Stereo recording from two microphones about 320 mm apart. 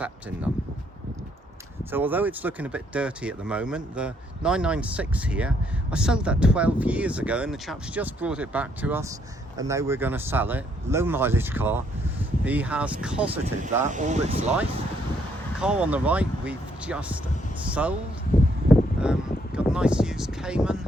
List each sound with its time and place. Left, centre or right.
0.0 s speech: centre
1.8 s speech: centre
13.9 s speech: right
15.5 s speech: centre
18.3 s a sound: left
18.7 s a sound: centre